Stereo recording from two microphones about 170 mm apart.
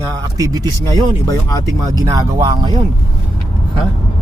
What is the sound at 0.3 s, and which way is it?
Speech, 20° right (ahead or behind).